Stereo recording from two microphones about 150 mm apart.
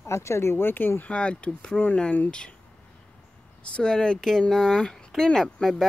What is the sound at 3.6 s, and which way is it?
Speech, 5° left (ahead or behind).